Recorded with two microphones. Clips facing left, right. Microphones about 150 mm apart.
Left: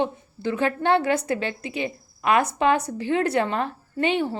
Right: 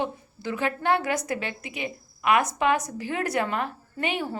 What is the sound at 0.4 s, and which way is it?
A woman's voice, 30° left (ahead or behind).